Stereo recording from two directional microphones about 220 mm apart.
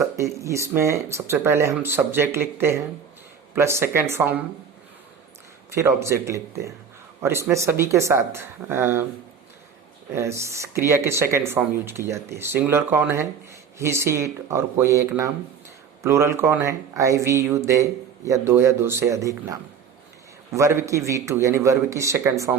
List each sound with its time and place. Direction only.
0.0 s speech: 15° right (ahead or behind)
5.7 s speech: 10° right (ahead or behind)
10.2 s speech: 10° right (ahead or behind)
20.6 s speech: 10° right (ahead or behind)